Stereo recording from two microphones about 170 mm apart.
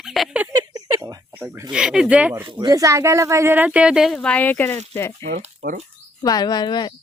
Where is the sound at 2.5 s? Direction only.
25° right (ahead or behind); by 5.1 s 15° left (ahead or behind).